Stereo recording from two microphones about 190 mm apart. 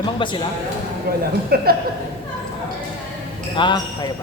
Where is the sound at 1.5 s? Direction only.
55° right (ahead or behind).